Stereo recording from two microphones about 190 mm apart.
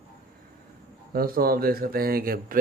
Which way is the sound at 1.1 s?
50° right (ahead or behind).